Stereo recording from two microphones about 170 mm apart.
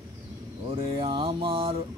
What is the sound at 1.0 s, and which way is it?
Mantra, 30° right (ahead or behind).